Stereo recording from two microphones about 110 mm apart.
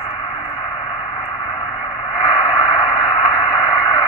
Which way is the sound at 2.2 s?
45° left (ahead or behind).